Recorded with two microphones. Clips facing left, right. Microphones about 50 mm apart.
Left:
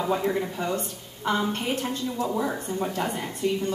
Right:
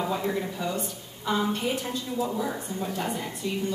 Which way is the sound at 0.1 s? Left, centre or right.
Left.